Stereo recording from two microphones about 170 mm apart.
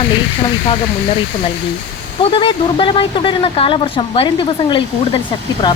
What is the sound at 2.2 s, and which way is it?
Speech, 30° left (ahead or behind).